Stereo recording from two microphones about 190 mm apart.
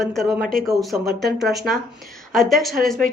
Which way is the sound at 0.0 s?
Centre (ahead or behind).